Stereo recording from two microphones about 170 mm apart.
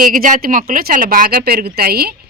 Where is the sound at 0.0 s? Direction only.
55° right (ahead or behind).